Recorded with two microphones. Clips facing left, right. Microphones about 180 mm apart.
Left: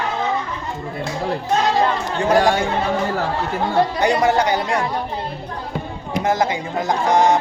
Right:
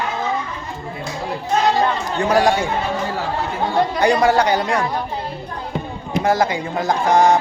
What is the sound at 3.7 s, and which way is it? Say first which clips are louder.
Speech: right 1 dB; 20° left (ahead or behind).